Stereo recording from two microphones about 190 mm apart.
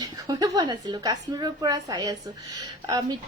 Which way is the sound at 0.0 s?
20° right (ahead or behind).